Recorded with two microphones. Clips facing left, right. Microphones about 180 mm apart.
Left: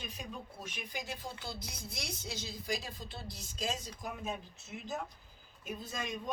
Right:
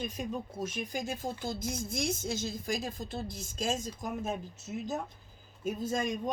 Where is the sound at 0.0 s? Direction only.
45° right (ahead or behind).